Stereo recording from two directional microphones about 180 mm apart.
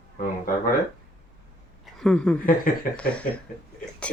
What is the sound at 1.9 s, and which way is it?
A woman's voice, 5° left (ahead or behind).